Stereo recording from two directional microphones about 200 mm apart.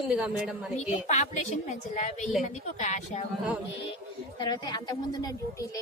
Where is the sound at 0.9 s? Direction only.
35° left (ahead or behind).